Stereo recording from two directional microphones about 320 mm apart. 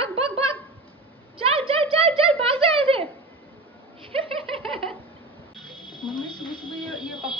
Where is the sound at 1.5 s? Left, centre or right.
Centre.